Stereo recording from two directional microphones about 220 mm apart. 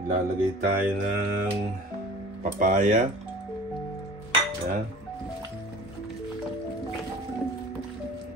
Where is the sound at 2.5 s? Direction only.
35° right (ahead or behind).